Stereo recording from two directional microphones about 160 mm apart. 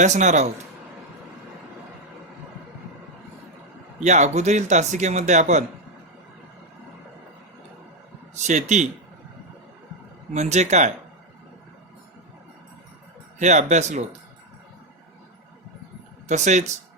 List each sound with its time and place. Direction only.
0.0 s speech: 50° right (ahead or behind)
4.0 s speech: 45° right (ahead or behind)
8.4 s speech: 50° right (ahead or behind)
10.3 s speech: 45° right (ahead or behind)
13.4 s speech: 45° right (ahead or behind)
16.3 s speech: 45° right (ahead or behind)